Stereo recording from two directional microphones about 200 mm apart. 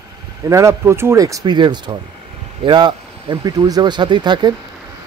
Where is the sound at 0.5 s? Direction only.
15° right (ahead or behind).